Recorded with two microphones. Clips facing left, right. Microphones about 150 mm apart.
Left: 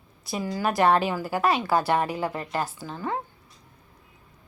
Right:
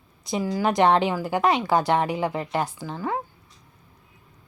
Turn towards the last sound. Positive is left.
turn(degrees=-15)  # may be behind; listen again after turning